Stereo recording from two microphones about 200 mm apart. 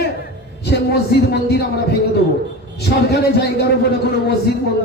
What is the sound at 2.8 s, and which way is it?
A man's voice, 55° left (ahead or behind).